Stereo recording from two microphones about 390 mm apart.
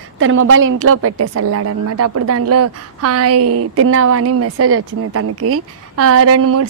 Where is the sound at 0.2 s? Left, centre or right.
Right.